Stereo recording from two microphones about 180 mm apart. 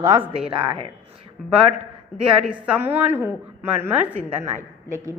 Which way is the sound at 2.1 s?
5° right (ahead or behind).